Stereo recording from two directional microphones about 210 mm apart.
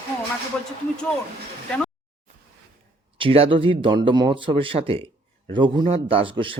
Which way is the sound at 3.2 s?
25° right (ahead or behind).